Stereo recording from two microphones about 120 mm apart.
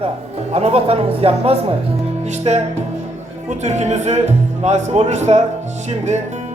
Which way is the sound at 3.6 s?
70° right (ahead or behind).